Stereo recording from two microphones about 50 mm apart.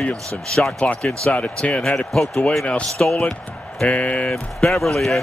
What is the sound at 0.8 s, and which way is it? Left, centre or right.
Speech, centre.